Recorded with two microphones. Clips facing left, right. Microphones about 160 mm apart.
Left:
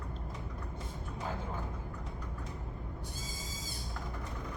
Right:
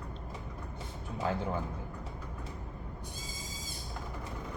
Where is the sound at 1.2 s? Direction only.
80° right.